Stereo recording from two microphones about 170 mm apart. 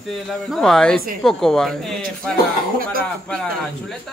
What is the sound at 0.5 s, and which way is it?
Speech, centre (ahead or behind).